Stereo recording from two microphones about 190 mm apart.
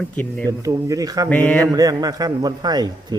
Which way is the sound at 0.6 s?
20° right (ahead or behind).